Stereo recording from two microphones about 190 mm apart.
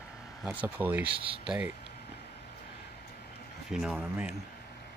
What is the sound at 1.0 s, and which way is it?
Speech, 30° right (ahead or behind).